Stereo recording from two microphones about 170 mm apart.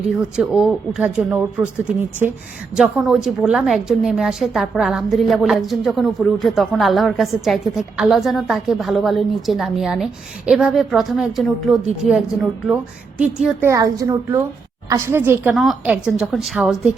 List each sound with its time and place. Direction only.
0.3 s a woman's voice: 5° right (ahead or behind)
15.5 s a woman's voice: centre (ahead or behind)